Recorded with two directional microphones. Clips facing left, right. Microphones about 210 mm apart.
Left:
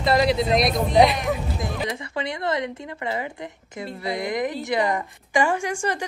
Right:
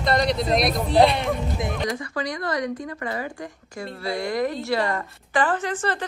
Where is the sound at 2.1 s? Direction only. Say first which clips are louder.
Left 4 dB; 25° left (ahead or behind).